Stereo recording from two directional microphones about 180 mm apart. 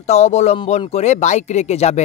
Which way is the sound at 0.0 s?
35° left (ahead or behind).